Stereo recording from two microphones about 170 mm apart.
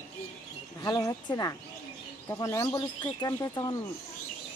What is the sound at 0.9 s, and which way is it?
Speech, 25° left (ahead or behind).